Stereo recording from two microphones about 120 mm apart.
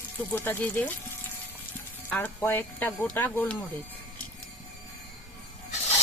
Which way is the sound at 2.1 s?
15° left (ahead or behind).